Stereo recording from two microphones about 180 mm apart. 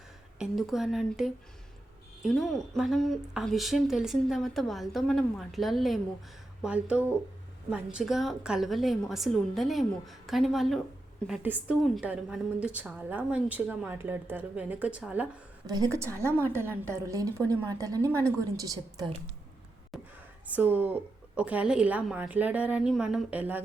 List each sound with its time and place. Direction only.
0.3 s a woman's voice: centre (ahead or behind)
15.6 s a woman's voice: 20° right (ahead or behind)
20.5 s a woman's voice: 10° right (ahead or behind)